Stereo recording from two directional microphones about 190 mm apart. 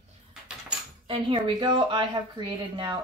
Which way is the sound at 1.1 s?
25° right (ahead or behind).